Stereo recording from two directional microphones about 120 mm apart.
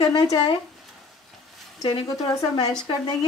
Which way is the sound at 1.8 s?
40° left (ahead or behind).